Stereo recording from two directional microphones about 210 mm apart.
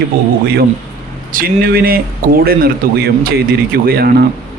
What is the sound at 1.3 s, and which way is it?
Speech, 45° right (ahead or behind).